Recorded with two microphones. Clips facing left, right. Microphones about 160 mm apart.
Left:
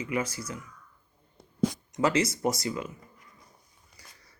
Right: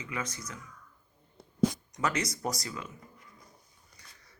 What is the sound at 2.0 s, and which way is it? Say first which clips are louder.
Speech: left 7 dB; 30° left (ahead or behind).